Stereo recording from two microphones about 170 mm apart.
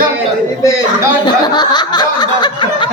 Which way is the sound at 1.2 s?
25° left (ahead or behind).